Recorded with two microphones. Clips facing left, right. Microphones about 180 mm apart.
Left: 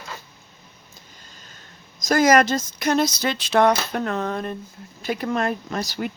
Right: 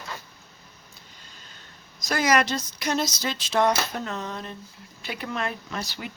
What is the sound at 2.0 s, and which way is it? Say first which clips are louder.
Speech: left 6 dB; 45° left (ahead or behind).